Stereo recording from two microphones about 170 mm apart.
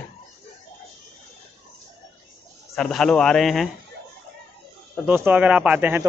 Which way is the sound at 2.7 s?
5° left (ahead or behind).